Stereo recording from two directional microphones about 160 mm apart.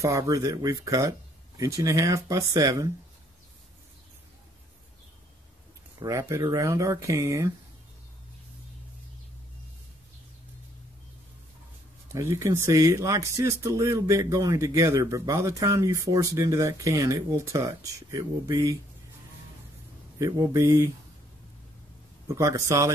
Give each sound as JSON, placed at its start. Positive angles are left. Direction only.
{"t": 0.0, "sound": "speech", "side_deg": -20}
{"t": 5.9, "sound": "speech", "side_deg": -20}
{"t": 12.1, "sound": "speech", "side_deg": -20}
{"t": 20.2, "sound": "speech", "side_deg": -20}
{"t": 22.3, "sound": "speech", "side_deg": -20}